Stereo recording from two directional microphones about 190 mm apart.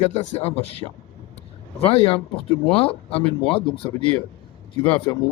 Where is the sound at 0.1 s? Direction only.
35° left (ahead or behind).